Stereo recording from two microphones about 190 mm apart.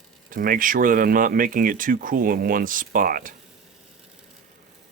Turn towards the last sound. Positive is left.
turn(degrees=-50)  # may be behind; listen again after turning